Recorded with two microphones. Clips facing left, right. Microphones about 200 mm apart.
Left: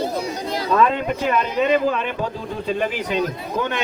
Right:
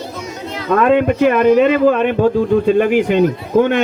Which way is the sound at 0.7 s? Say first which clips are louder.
Right 7 dB; 60° right (ahead or behind).